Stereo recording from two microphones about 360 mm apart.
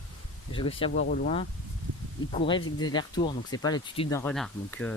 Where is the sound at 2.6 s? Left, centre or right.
Left.